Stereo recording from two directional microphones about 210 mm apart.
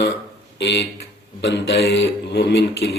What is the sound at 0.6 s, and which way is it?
A man's voice, 55° left (ahead or behind).